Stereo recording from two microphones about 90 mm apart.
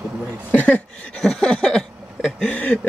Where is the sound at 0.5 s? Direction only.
15° left (ahead or behind).